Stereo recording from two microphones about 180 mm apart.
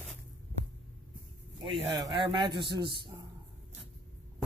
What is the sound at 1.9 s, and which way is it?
Speech, 20° right (ahead or behind).